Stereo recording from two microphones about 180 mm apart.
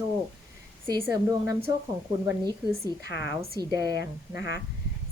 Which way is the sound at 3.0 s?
65° left (ahead or behind).